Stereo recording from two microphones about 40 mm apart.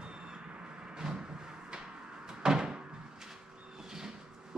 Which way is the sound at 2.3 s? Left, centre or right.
Centre.